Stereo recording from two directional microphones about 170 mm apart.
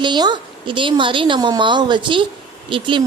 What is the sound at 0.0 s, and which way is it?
Speech, 25° right (ahead or behind).